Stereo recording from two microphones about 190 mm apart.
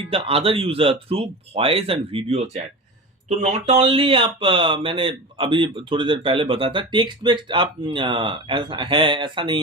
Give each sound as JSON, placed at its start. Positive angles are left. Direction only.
{"t": 0.1, "sound": "speech", "side_deg": -30}